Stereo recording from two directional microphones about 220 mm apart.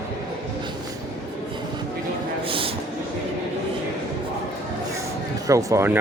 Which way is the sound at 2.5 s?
25° right (ahead or behind).